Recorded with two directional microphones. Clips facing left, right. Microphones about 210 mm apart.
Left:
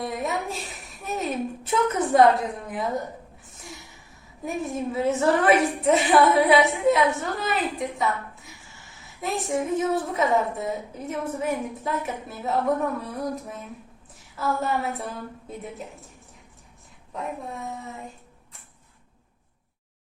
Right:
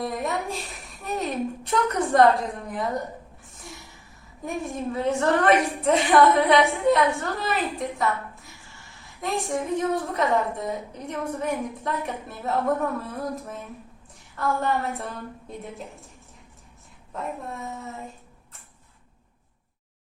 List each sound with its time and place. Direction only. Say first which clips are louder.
0.0 s a woman's voice: even; centre (ahead or behind)
3.4 s a sound: even; centre (ahead or behind)
4.4 s a woman's voice: left 1 dB; centre (ahead or behind)
17.1 s a woman's voice: even; centre (ahead or behind)